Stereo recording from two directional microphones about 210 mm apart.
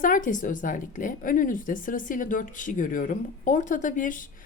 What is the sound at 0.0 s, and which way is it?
A woman's voice, 40° left (ahead or behind).